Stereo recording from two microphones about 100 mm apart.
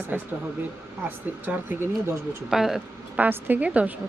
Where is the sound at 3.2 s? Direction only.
15° right (ahead or behind).